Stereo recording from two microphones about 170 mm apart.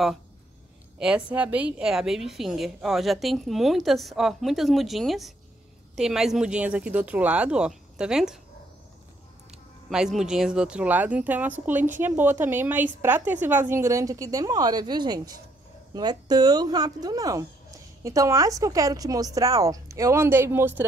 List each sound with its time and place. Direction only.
0.9 s a woman's voice: 5° right (ahead or behind)
9.8 s a woman's voice: 5° right (ahead or behind)